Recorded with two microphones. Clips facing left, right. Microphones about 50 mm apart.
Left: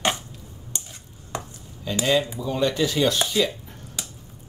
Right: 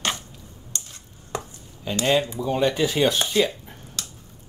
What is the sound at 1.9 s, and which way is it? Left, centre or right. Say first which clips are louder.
Speech: right 1 dB; right.